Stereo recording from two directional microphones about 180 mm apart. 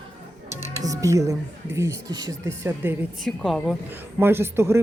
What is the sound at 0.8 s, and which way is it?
Speech, 20° right (ahead or behind).